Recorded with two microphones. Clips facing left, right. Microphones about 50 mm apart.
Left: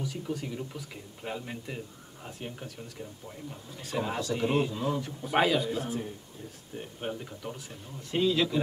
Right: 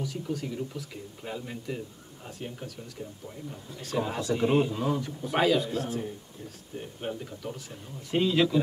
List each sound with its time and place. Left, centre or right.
0.0 s a man's voice: centre
3.8 s a man's voice: centre
4.4 s a man's voice: centre
5.0 s a man's voice: centre
8.1 s a man's voice: centre